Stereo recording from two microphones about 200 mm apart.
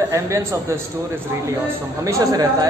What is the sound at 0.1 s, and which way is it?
Speech, 15° right (ahead or behind).